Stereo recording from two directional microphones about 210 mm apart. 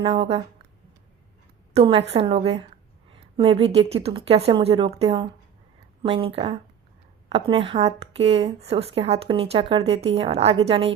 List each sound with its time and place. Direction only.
0.0 s speech: 25° right (ahead or behind)
1.7 s speech: 30° right (ahead or behind)